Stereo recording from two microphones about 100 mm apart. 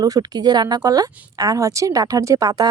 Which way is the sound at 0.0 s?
40° right (ahead or behind).